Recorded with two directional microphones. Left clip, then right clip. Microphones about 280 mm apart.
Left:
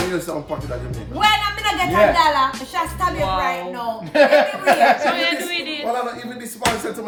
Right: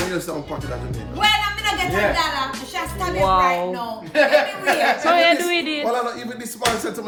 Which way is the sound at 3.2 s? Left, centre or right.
Centre.